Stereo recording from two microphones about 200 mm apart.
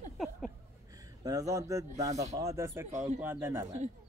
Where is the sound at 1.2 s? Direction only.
15° right (ahead or behind).